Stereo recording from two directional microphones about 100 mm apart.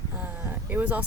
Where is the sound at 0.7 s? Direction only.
15° right (ahead or behind).